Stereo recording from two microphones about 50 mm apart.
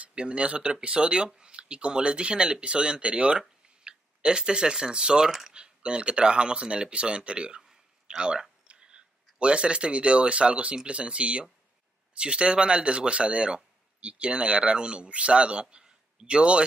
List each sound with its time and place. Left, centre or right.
0.0 s speech: right
5.6 s a man's voice: right